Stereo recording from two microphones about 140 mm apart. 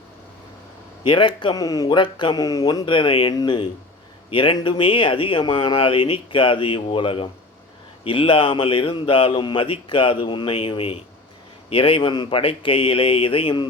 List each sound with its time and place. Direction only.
1.0 s speech: 35° left (ahead or behind)